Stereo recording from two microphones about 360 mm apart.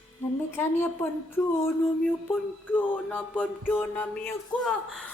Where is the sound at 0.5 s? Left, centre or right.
Centre.